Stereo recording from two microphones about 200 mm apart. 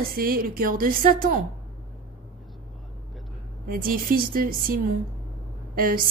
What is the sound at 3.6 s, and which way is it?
A woman's voice, 45° right (ahead or behind).